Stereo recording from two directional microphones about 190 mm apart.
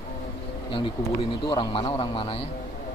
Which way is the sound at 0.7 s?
25° left (ahead or behind).